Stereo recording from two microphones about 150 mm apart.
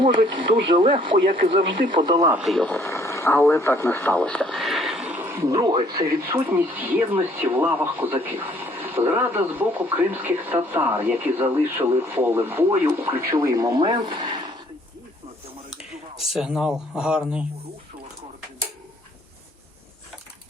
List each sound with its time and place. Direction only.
0.0 s speech: 35° right (ahead or behind)
2.3 s speech: centre (ahead or behind)
2.7 s speech: 20° left (ahead or behind); by 14.5 s 30° right (ahead or behind)
15.7 s speech: 5° right (ahead or behind)